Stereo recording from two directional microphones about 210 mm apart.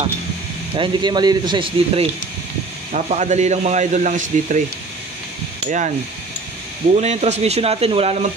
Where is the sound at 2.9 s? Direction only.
35° right (ahead or behind).